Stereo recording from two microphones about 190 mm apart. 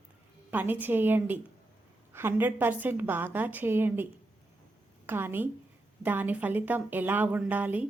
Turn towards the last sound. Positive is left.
turn(degrees=-10)  # may be behind; listen again after turning